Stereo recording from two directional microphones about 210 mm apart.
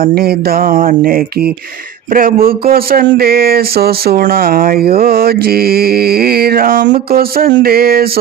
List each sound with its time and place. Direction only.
0.0 s speech: 50° right (ahead or behind)